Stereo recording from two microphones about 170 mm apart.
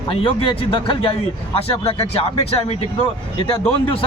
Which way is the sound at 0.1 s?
30° left (ahead or behind).